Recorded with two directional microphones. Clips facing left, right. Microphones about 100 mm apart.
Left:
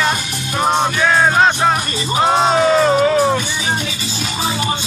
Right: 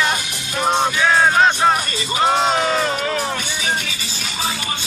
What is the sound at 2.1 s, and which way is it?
Music, 30° left (ahead or behind).